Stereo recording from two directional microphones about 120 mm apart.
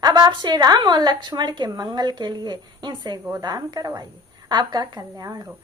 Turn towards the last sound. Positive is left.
turn(degrees=-30)  # may be behind; listen again after turning